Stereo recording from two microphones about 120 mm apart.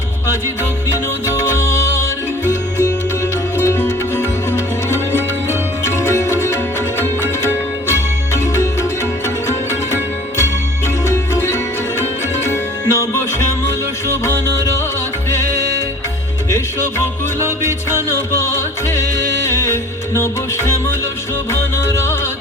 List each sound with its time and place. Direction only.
1.3 s music: 20° left (ahead or behind)
7.9 s music: 20° left (ahead or behind)
17.4 s music: 20° right (ahead or behind)
18.1 s music: 25° left (ahead or behind)
21.5 s music: 20° left (ahead or behind)